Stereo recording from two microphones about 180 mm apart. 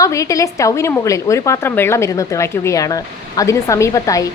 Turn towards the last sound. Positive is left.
turn(degrees=20)  # may be behind; listen again after turning